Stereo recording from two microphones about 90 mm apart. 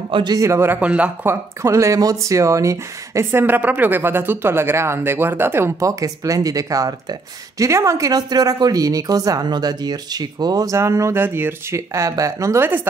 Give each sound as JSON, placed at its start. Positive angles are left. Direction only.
{"t": 0.1, "sound": "a man's voice", "side_deg": -55}
{"t": 0.4, "sound": "speech", "side_deg": -30}
{"t": 0.7, "sound": "speech", "side_deg": -15}
{"t": 1.2, "sound": "speech", "side_deg": -30}
{"t": 5.8, "sound": "speech", "side_deg": -40}
{"t": 10.8, "sound": "speech", "side_deg": -35}